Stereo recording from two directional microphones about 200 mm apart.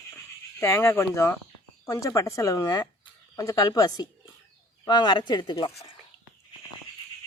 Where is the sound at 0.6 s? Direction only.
15° left (ahead or behind).